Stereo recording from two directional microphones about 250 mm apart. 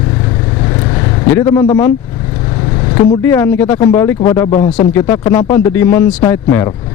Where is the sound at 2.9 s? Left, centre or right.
Centre.